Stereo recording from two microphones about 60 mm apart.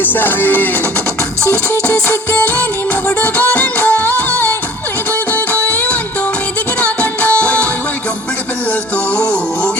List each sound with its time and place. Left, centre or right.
0.0 s music: left
9.1 s music: centre